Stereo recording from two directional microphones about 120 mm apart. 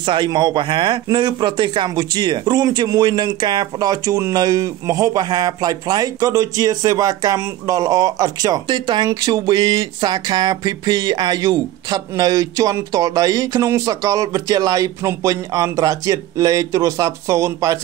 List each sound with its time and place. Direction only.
0.0 s speech: 40° right (ahead or behind)